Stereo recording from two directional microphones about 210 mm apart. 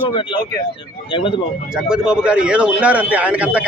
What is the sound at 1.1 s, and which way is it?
Speech, 25° left (ahead or behind).